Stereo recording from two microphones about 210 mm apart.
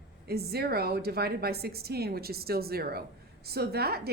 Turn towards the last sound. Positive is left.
turn(degrees=-50)  # may be behind; listen again after turning